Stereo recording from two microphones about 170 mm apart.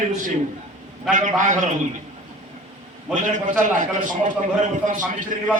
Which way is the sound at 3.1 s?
50° right (ahead or behind).